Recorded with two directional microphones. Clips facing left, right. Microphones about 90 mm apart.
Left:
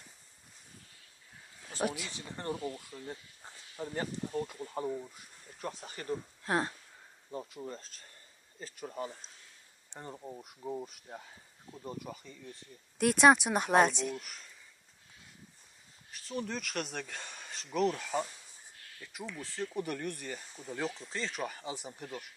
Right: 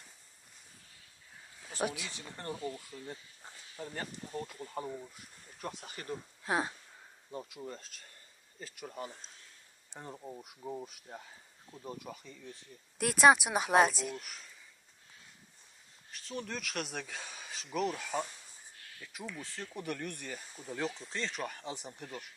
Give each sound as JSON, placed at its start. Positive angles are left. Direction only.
{"t": 2.3, "sound": "speech", "side_deg": 20}
{"t": 2.9, "sound": "speech", "side_deg": 5}
{"t": 4.6, "sound": "speech", "side_deg": 5}
{"t": 5.7, "sound": "speech", "side_deg": 35}
{"t": 6.4, "sound": "speech", "side_deg": -10}
{"t": 7.3, "sound": "speech", "side_deg": 35}
{"t": 9.8, "sound": "speech", "side_deg": 0}
{"t": 16.1, "sound": "speech", "side_deg": 0}